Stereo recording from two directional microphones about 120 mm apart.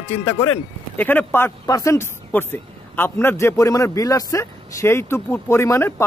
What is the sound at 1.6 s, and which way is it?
A man's voice, 25° left (ahead or behind).